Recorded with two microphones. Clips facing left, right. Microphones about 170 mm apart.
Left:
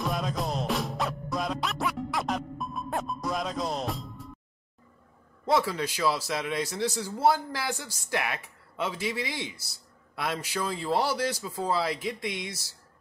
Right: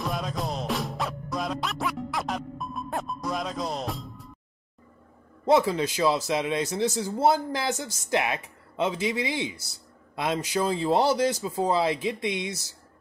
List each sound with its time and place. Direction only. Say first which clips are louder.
0.0 s music: even; centre (ahead or behind)
5.5 s speech: right 5 dB; 20° right (ahead or behind)